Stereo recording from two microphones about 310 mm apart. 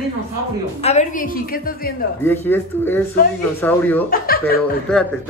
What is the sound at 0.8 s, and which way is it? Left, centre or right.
Speech, left.